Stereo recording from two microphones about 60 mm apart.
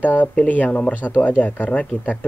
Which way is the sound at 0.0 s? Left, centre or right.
Left.